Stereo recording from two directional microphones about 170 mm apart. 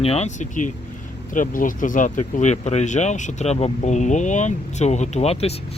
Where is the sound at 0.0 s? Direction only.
40° left (ahead or behind).